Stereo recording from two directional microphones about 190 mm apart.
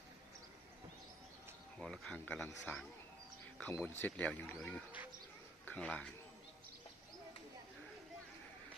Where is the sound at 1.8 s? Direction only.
5° left (ahead or behind).